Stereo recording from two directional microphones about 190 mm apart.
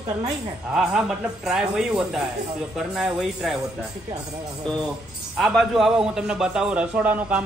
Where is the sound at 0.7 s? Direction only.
5° right (ahead or behind).